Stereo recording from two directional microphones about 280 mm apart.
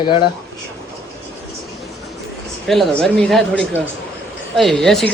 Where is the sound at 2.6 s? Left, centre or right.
Centre.